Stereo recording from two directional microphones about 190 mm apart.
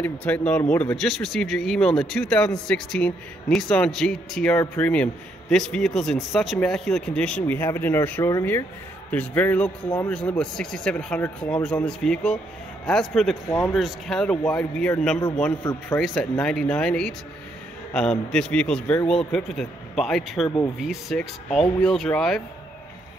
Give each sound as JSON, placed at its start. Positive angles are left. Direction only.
{"t": 0.0, "sound": "a man's voice", "side_deg": 5}
{"t": 13.5, "sound": "a man's voice", "side_deg": 15}
{"t": 13.7, "sound": "speech", "side_deg": 0}
{"t": 18.3, "sound": "speech", "side_deg": 5}